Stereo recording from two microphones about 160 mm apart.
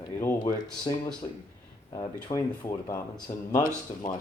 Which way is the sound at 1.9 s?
20° left (ahead or behind).